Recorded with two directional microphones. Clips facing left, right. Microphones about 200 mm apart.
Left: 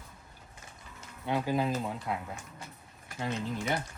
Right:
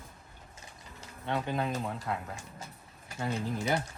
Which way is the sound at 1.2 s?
5° left (ahead or behind).